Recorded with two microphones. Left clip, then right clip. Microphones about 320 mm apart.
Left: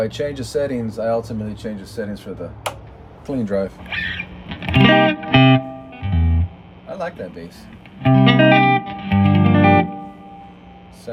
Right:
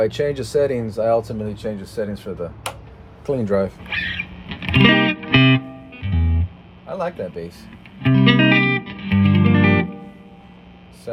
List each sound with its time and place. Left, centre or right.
0.0 s speech: centre
3.8 s music: centre
6.9 s a man's voice: centre
7.9 s music: centre